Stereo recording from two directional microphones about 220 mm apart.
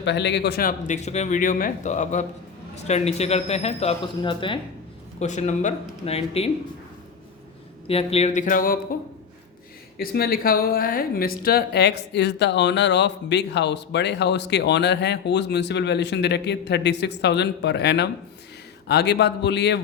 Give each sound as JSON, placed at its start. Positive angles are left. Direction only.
{"t": 0.0, "sound": "a man's voice", "side_deg": 50}
{"t": 5.2, "sound": "a man's voice", "side_deg": 30}
{"t": 7.9, "sound": "a man's voice", "side_deg": 25}
{"t": 10.0, "sound": "speech", "side_deg": 45}